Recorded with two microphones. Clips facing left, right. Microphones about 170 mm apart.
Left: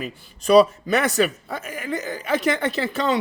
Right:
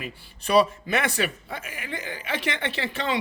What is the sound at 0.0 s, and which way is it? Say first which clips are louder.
A man's voice: left 6 dB; 40° left (ahead or behind).